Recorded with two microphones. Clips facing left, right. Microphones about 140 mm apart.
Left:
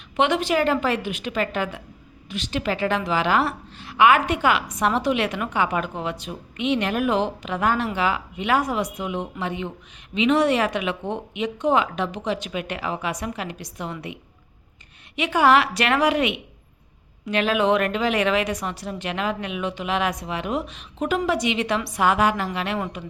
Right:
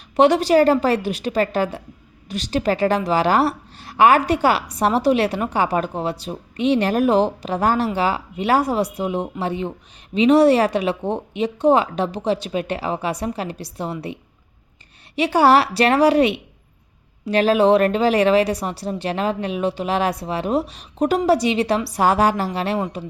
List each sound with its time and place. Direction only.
0.2 s a woman's voice: 40° right (ahead or behind)